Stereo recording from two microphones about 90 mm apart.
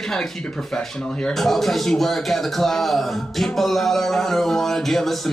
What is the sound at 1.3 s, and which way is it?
A man's voice, 5° left (ahead or behind).